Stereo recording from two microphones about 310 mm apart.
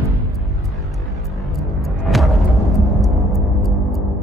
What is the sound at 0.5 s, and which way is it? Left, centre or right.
Music, centre.